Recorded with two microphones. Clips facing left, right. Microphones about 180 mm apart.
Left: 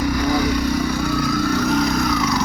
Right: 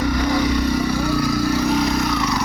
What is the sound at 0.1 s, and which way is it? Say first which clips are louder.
Vehicle: even; centre (ahead or behind).